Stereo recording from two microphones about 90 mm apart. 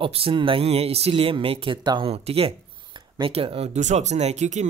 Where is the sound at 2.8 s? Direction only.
60° right (ahead or behind); by 3.6 s 90° right.